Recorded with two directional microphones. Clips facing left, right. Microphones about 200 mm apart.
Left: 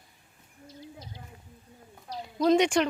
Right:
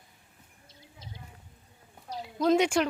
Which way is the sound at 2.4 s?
5° right (ahead or behind).